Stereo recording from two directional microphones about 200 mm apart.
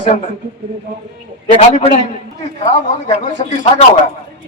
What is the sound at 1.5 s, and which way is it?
Speech, 30° left (ahead or behind).